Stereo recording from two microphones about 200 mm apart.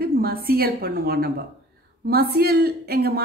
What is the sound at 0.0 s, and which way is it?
A woman's voice, 50° right (ahead or behind).